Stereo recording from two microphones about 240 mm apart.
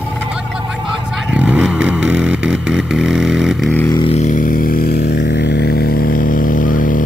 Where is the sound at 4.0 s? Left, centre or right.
Left.